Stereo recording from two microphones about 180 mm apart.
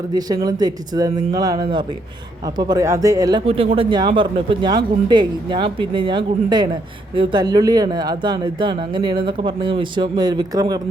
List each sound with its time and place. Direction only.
0.1 s speech: 20° right (ahead or behind)
3.4 s speech: 30° right (ahead or behind)